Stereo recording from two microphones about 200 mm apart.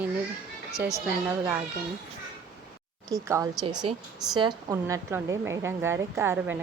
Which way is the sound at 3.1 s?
15° right (ahead or behind).